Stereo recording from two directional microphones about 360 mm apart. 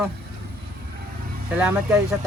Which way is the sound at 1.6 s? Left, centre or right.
Centre.